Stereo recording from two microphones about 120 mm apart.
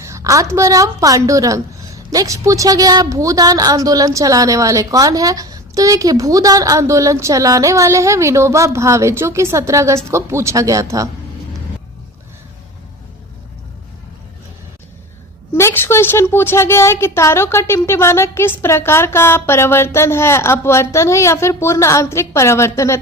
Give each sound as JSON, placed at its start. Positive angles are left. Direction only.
{"t": 0.0, "sound": "a woman's voice", "side_deg": -25}
{"t": 15.5, "sound": "a woman's voice", "side_deg": 20}